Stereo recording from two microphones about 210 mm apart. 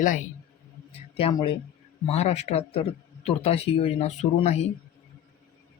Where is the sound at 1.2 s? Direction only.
25° left (ahead or behind).